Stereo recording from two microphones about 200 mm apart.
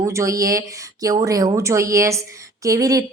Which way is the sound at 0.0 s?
15° right (ahead or behind).